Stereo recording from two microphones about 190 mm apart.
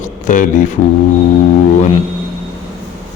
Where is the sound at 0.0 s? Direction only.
45° left (ahead or behind).